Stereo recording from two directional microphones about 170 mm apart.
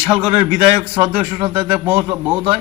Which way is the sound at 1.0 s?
35° right (ahead or behind).